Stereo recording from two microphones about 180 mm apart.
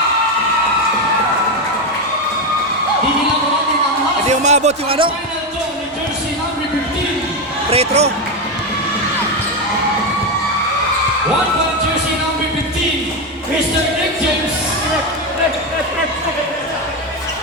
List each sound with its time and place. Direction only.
4.3 s speech: 40° right (ahead or behind)
7.7 s speech: 35° right (ahead or behind)